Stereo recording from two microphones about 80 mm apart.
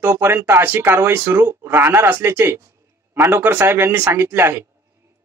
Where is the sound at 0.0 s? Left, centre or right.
Right.